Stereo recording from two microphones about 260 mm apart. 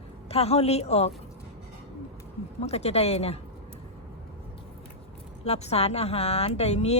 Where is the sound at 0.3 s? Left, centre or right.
Left.